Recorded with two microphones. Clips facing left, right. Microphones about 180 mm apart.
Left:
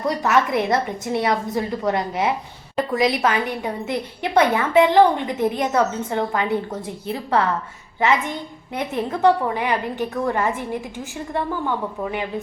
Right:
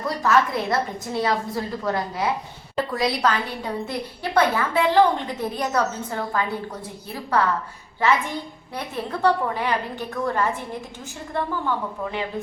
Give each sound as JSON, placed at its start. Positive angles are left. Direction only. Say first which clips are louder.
{"t": 0.0, "sound": "a woman's voice", "louder": "left 1 dB", "side_deg": 20}
{"t": 9.2, "sound": "a woman's voice", "louder": "left 3 dB", "side_deg": 15}